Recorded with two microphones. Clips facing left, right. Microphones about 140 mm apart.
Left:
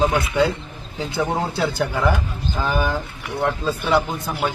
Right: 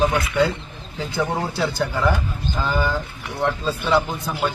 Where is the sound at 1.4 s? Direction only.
20° left (ahead or behind).